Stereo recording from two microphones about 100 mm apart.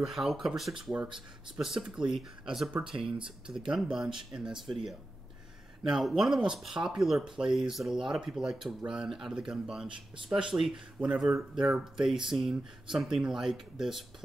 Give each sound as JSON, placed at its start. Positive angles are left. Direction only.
{"t": 0.0, "sound": "speech", "side_deg": 0}
{"t": 5.9, "sound": "speech", "side_deg": -5}
{"t": 9.8, "sound": "speech", "side_deg": -55}
{"t": 10.3, "sound": "speech", "side_deg": -5}